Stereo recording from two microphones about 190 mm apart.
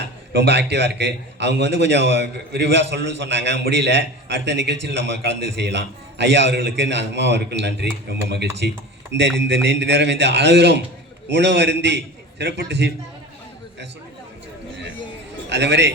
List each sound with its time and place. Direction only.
0.0 s a man's voice: 65° right (ahead or behind)
15.4 s a man's voice: 65° right (ahead or behind)